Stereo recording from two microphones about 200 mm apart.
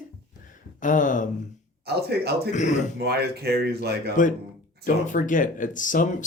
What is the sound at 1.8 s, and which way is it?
Speech, 55° right (ahead or behind).